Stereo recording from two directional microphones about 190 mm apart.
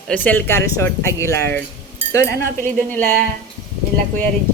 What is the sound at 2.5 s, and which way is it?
Speech, 45° right (ahead or behind).